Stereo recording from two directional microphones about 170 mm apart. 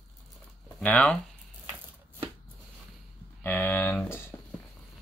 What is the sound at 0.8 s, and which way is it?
Speech, 5° left (ahead or behind).